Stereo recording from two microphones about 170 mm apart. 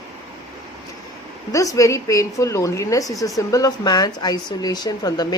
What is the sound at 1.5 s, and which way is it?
A woman's voice, 20° left (ahead or behind).